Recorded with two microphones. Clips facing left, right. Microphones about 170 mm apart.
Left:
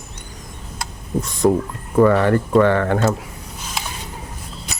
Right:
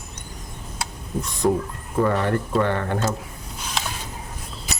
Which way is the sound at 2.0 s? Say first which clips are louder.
Left 7 dB; 90° left.